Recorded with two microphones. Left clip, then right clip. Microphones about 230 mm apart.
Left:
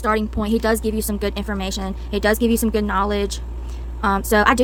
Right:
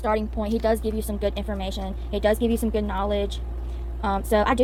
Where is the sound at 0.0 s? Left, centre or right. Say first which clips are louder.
Left 4 dB; left.